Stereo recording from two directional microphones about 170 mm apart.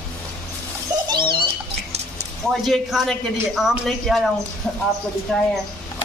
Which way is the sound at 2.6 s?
Centre (ahead or behind).